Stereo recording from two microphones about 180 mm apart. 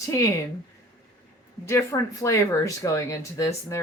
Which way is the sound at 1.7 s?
15° left (ahead or behind).